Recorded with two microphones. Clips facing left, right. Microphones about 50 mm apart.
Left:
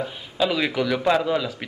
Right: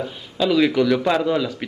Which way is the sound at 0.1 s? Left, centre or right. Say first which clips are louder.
Right 7 dB; centre.